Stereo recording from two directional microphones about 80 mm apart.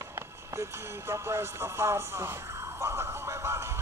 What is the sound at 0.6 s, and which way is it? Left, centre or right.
Speech, right.